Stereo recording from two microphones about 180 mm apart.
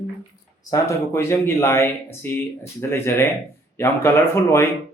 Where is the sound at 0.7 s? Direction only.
15° left (ahead or behind).